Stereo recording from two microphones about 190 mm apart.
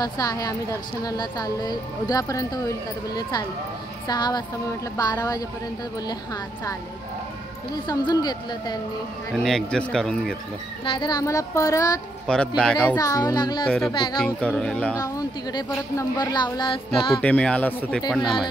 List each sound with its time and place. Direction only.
0.0 s speech: 20° left (ahead or behind)
7.7 s speech: 20° left (ahead or behind)
9.3 s speech: centre (ahead or behind)
10.9 s speech: 20° left (ahead or behind)
12.3 s speech: 5° left (ahead or behind)
12.9 s speech: 20° left (ahead or behind)
13.7 s speech: centre (ahead or behind)
15.0 s speech: 20° left (ahead or behind)
17.1 s speech: 5° left (ahead or behind)